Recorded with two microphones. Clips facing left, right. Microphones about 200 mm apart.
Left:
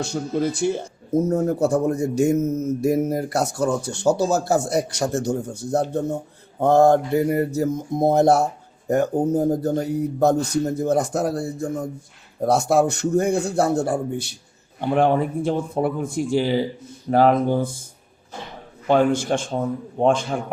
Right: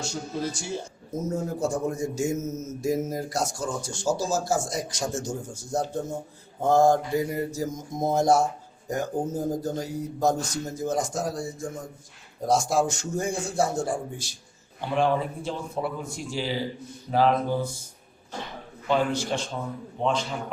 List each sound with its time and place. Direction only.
0.0 s a man's voice: 60° left (ahead or behind)
18.9 s a man's voice: 55° left (ahead or behind)